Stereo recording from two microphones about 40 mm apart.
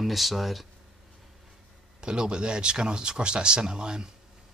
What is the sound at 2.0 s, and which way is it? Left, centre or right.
Speech, right.